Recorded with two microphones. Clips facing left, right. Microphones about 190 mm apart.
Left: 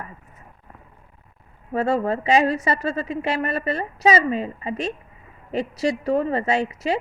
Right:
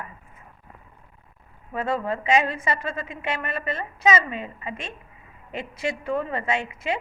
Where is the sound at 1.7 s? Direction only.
35° left (ahead or behind).